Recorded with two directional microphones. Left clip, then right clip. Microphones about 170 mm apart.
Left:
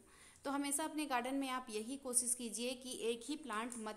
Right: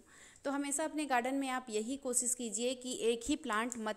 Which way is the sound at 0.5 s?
20° right (ahead or behind).